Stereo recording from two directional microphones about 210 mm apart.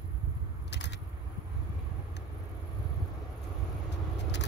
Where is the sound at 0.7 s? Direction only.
55° left (ahead or behind).